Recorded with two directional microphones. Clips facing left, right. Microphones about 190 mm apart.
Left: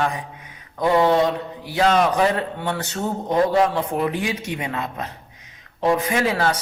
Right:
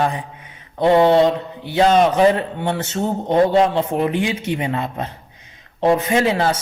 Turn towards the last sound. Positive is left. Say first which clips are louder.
# right 3 dB
turn(degrees=-25)  # may be behind; listen again after turning